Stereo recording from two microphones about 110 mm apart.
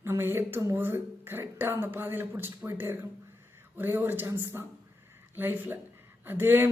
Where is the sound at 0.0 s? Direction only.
20° right (ahead or behind).